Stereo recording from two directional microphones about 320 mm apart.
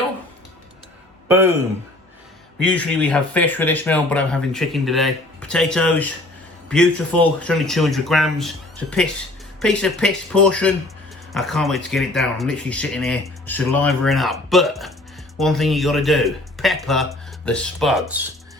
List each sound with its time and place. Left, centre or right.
2.6 s speech: centre